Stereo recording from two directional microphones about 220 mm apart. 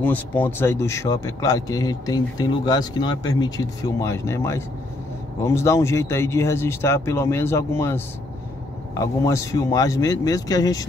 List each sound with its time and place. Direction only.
0.0 s speech: 10° left (ahead or behind)